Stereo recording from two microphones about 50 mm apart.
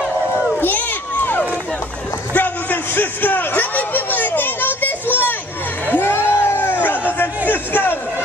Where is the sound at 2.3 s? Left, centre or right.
Left.